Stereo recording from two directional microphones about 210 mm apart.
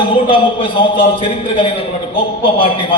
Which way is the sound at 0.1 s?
25° left (ahead or behind).